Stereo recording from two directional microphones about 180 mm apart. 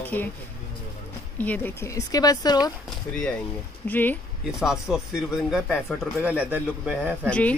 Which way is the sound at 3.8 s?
10° left (ahead or behind).